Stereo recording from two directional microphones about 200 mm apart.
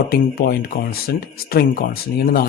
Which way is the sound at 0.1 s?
50° left (ahead or behind).